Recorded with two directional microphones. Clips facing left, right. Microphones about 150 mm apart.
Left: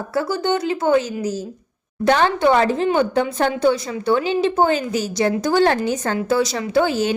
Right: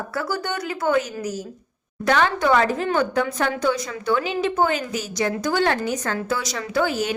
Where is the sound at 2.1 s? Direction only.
30° left (ahead or behind).